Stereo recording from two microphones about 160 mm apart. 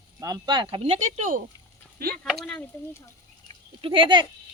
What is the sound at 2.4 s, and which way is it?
Speech, 10° left (ahead or behind).